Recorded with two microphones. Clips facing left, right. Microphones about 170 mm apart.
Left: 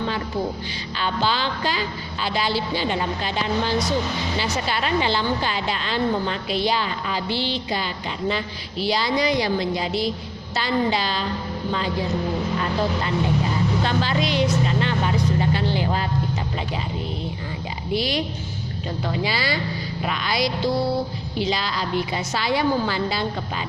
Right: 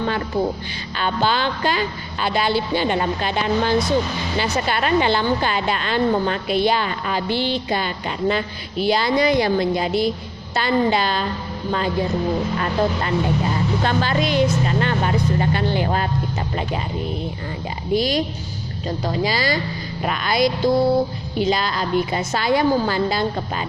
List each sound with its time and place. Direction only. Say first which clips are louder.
0.9 s a woman's voice: right 3 dB; 55° right (ahead or behind)
12.5 s a woman's voice: right 3 dB; 55° right (ahead or behind)
17.9 s a woman's voice: right 4 dB; 45° right (ahead or behind)